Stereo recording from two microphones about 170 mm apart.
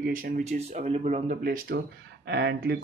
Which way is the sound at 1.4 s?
65° right (ahead or behind).